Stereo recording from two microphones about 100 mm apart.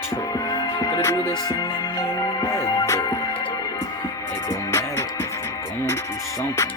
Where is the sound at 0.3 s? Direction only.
40° left (ahead or behind).